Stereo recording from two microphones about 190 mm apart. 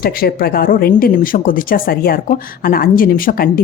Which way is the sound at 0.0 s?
50° left (ahead or behind).